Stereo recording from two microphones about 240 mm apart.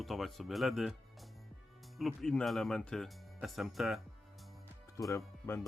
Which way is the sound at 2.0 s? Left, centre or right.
Centre.